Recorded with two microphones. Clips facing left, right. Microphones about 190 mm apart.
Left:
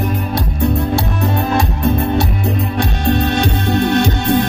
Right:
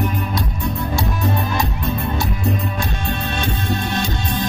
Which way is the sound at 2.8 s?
70° left (ahead or behind).